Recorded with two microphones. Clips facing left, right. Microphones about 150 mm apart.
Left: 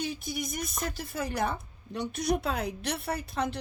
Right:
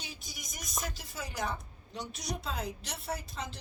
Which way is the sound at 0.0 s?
60° left (ahead or behind).